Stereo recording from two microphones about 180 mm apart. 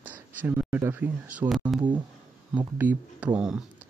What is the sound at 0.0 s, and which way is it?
Speech, 10° right (ahead or behind).